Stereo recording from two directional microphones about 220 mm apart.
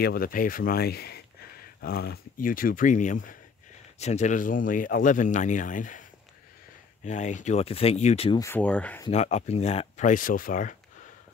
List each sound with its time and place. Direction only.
0.0 s speech: 45° left (ahead or behind)
7.1 s speech: 35° left (ahead or behind)
8.4 s speech: 10° left (ahead or behind)
9.1 s speech: 30° left (ahead or behind)